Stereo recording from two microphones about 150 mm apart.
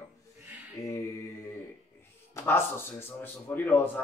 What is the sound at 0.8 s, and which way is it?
Mantra, 20° left (ahead or behind).